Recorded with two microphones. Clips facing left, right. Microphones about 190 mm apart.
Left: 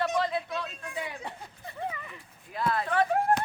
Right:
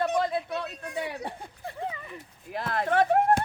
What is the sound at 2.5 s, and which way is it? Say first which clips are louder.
Speech: even; 70° right (ahead or behind).